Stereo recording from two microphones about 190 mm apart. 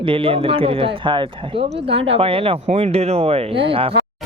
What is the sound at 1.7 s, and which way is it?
Speech, 65° right (ahead or behind).